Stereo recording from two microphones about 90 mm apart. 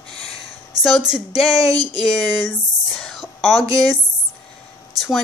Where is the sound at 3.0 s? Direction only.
Centre (ahead or behind).